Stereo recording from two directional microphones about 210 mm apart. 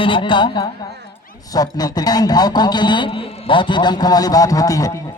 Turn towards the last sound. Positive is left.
turn(degrees=15)  # may be behind; listen again after turning